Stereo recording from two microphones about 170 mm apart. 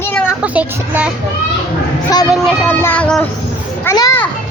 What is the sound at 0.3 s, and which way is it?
Speech, 10° right (ahead or behind).